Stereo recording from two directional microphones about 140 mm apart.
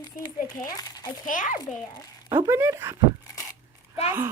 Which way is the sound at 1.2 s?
70° left (ahead or behind).